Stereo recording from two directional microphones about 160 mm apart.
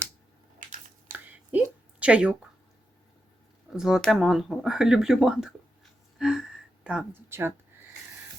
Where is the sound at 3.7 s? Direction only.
5° right (ahead or behind).